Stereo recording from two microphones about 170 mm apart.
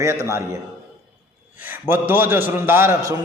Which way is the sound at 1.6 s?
10° right (ahead or behind).